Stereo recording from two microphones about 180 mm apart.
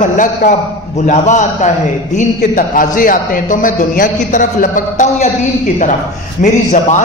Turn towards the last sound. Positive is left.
turn(degrees=45)  # may be behind; listen again after turning